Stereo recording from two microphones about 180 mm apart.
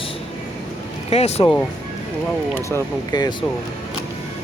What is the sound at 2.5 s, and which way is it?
Speech, 15° left (ahead or behind).